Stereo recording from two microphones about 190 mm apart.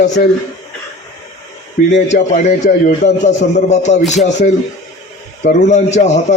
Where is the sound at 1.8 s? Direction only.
45° left (ahead or behind).